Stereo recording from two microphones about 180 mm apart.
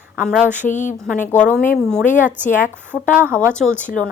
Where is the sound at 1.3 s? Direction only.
5° left (ahead or behind).